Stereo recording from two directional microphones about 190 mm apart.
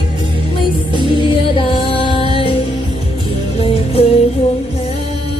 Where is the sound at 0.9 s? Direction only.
25° left (ahead or behind).